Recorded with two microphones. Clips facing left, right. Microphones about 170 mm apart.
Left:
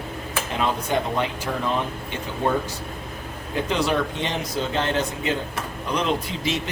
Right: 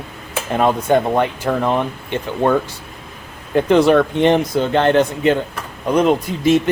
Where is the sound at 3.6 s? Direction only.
55° right (ahead or behind).